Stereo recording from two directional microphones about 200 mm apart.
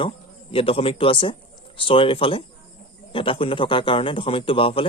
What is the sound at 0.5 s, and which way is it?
A man's voice, 30° left (ahead or behind).